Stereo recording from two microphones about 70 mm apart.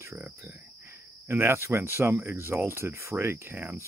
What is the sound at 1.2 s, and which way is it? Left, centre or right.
Speech, right.